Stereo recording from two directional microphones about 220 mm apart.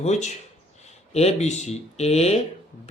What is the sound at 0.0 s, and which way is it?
Speech, 30° left (ahead or behind).